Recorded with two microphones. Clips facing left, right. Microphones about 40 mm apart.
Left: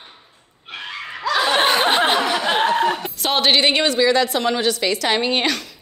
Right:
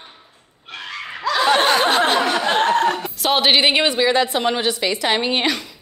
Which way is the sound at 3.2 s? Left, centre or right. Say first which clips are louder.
Right 1 dB; centre.